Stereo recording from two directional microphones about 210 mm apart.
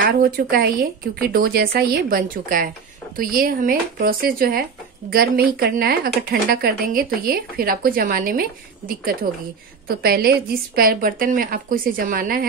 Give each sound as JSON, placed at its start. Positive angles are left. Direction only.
{"t": 0.0, "sound": "a woman's voice", "side_deg": -45}